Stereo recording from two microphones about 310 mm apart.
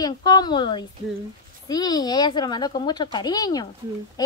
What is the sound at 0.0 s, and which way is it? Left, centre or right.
Speech, centre.